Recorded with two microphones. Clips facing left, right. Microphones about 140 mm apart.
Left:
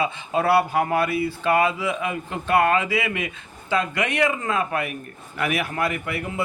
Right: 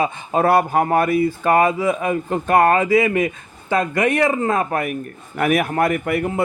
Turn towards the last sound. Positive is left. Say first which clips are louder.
# right 7 dB
turn(degrees=-50)  # may be behind; listen again after turning